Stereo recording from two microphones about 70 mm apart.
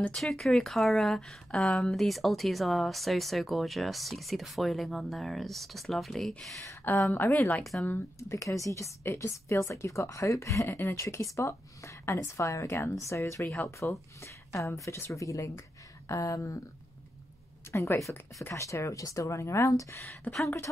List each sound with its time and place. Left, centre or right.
0.1 s speech: centre
7.0 s a woman's voice: left
7.3 s speech: left
8.2 s speech: left
9.0 s a woman's voice: left
9.3 s a woman's voice: left
17.6 s a woman's voice: left